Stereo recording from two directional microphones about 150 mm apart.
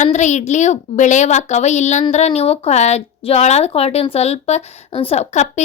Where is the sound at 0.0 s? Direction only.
50° left (ahead or behind).